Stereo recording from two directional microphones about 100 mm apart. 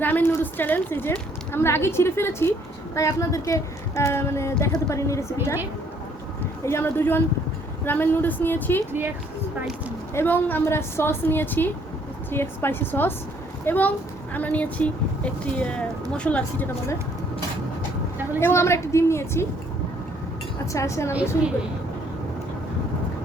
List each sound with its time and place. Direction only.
0.0 s speech: 20° left (ahead or behind)
6.7 s speech: 25° left (ahead or behind)
8.9 s speech: 20° right (ahead or behind)
10.2 s speech: 20° left (ahead or behind)
18.3 s speech: 25° left (ahead or behind)
20.7 s a woman's voice: 30° left (ahead or behind)